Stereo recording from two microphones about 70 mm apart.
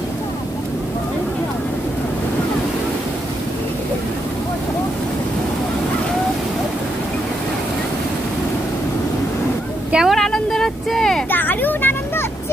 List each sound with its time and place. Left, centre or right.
10.0 s vehicle: centre
11.2 s vehicle: left